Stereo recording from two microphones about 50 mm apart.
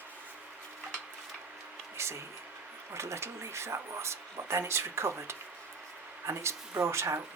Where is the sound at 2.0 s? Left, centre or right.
Right.